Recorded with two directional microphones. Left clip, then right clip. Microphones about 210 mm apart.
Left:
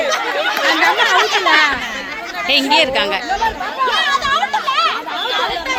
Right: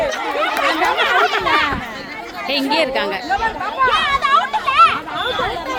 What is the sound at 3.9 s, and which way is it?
Children playing, 50° left (ahead or behind).